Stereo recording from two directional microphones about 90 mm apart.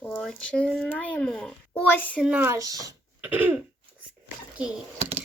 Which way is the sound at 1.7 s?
20° left (ahead or behind).